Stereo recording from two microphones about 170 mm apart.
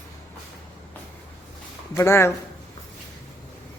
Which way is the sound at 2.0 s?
15° left (ahead or behind).